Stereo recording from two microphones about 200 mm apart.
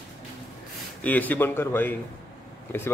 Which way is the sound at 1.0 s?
10° left (ahead or behind).